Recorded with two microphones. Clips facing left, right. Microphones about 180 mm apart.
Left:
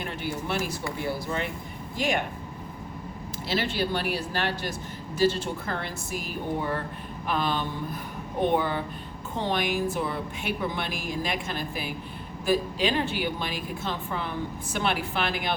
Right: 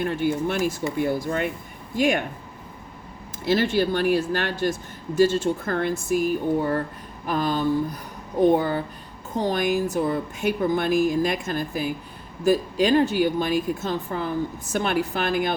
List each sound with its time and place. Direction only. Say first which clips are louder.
0.0 s speech: right 9 dB; 50° right (ahead or behind)
3.4 s speech: right 7 dB; 50° right (ahead or behind)
7.3 s a sound: right 4 dB; 40° right (ahead or behind)
8.5 s speech: right 3 dB; 45° right (ahead or behind)